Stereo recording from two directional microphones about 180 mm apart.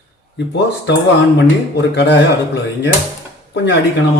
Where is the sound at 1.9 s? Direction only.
75° left (ahead or behind).